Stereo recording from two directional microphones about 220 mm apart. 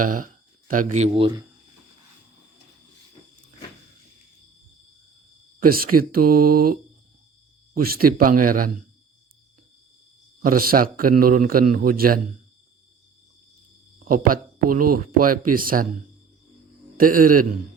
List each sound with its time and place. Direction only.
0.0 s speech: 35° right (ahead or behind); by 1.5 s 20° right (ahead or behind)
5.5 s speech: 40° right (ahead or behind)
6.2 s mantra: 90° right
7.8 s speech: 45° right (ahead or behind)
10.4 s speech: 40° right (ahead or behind)
14.0 s speech: 40° right (ahead or behind)
17.0 s speech: 40° right (ahead or behind)